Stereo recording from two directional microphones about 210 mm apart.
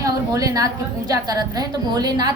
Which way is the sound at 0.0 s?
15° right (ahead or behind).